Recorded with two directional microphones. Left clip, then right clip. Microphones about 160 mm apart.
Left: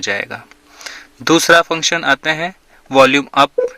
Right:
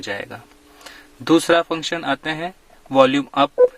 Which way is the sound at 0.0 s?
20° left (ahead or behind).